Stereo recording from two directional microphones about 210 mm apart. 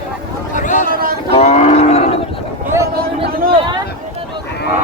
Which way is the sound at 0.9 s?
45° right (ahead or behind).